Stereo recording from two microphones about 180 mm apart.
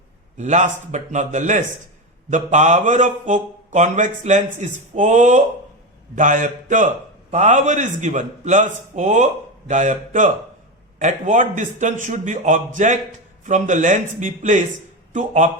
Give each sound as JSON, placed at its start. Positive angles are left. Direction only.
{"t": 0.3, "sound": "a man's voice", "side_deg": -40}